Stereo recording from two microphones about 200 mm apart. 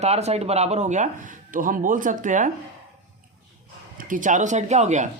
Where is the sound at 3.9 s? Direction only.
40° right (ahead or behind).